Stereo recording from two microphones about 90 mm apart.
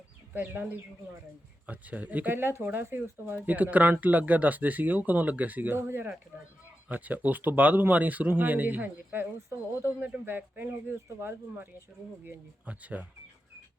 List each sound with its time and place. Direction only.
0.3 s speech: 20° right (ahead or behind)